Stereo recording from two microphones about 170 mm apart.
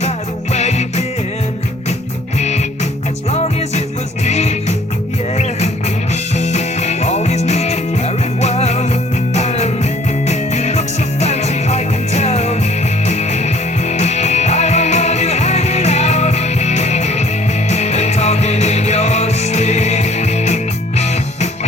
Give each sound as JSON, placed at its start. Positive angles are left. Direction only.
{"t": 0.5, "sound": "music", "side_deg": 40}
{"t": 2.4, "sound": "music", "side_deg": 40}
{"t": 4.3, "sound": "music", "side_deg": 40}